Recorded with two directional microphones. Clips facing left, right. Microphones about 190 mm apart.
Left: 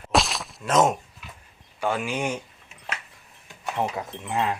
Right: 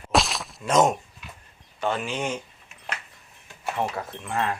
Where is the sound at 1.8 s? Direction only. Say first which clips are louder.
Left 1 dB; 10° left (ahead or behind).